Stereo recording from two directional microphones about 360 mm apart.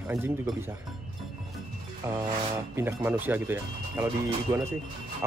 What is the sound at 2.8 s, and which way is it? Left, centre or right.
Speech, centre.